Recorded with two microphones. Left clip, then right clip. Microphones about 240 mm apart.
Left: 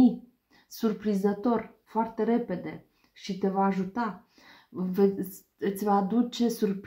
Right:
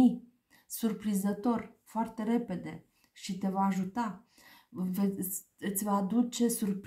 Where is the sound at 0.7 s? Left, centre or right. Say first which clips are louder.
Left 6 dB; right.